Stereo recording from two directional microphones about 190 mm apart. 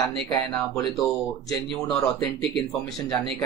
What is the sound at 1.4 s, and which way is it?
Speech, centre (ahead or behind).